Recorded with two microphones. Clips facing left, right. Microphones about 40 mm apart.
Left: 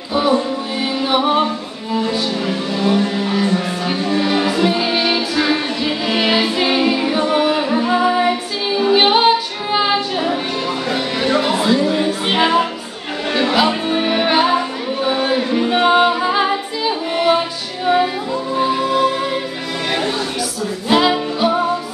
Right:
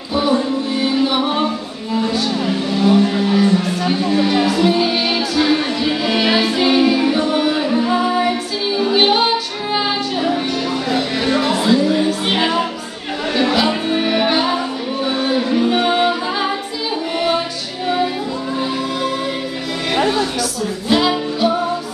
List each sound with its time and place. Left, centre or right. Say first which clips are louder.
0.1 s music: even; centre
2.0 s speech: right 1 dB; centre
3.4 s music: right 2 dB; centre
18.6 s music: left 7 dB; centre
20.9 s music: left 2 dB; centre